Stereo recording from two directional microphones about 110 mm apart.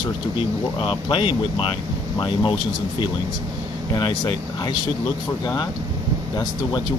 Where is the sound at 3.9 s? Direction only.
45° left (ahead or behind).